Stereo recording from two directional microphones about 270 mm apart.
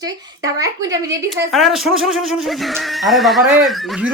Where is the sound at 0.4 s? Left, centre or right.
Centre.